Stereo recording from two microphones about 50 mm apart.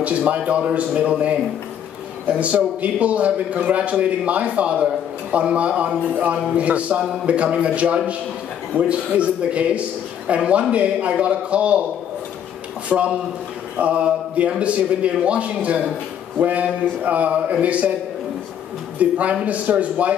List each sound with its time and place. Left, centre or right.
0.0 s a man's voice: right
2.4 s a man's voice: right
12.8 s a man's voice: right
18.9 s a man's voice: right